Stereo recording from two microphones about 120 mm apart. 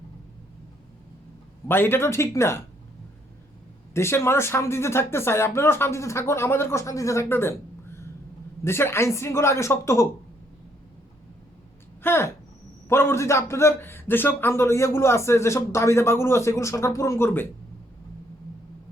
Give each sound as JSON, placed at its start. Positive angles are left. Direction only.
{"t": 1.6, "sound": "a man's voice", "side_deg": 20}
{"t": 3.9, "sound": "a man's voice", "side_deg": 20}
{"t": 12.0, "sound": "a man's voice", "side_deg": 20}